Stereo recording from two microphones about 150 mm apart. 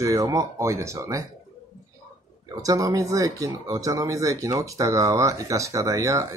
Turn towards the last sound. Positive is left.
turn(degrees=-20)  # may be behind; listen again after turning